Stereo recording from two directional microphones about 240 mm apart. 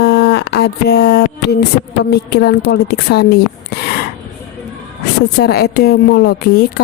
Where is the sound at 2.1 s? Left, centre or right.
Left.